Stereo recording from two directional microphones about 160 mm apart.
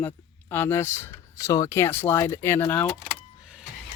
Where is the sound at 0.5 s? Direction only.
15° left (ahead or behind).